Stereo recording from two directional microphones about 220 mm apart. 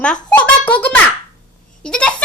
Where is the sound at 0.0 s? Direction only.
5° left (ahead or behind).